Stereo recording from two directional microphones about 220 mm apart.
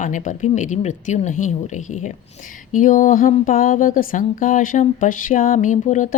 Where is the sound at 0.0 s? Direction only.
35° left (ahead or behind).